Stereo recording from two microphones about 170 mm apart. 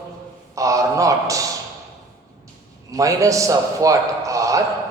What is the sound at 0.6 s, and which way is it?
Speech, 20° right (ahead or behind).